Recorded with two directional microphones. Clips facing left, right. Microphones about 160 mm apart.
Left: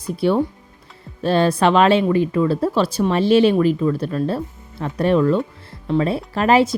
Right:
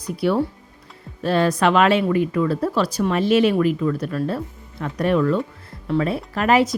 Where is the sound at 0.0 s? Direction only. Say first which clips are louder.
Left 2 dB; 25° left (ahead or behind).